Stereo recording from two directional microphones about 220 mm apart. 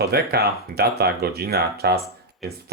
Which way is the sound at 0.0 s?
45° right (ahead or behind).